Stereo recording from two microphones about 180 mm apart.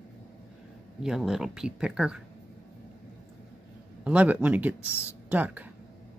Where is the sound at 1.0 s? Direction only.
Centre (ahead or behind).